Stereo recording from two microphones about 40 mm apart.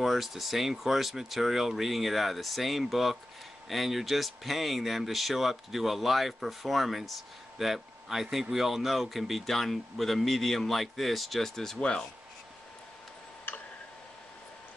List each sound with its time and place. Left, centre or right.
0.0 s speech: centre
11.8 s speech: left